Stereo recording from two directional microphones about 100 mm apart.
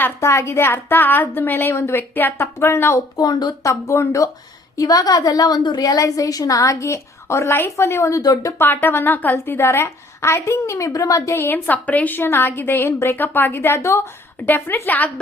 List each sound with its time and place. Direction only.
0.0 s a woman's voice: 30° left (ahead or behind)
3.2 s a woman's voice: 40° left (ahead or behind); by 15.1 s 15° left (ahead or behind)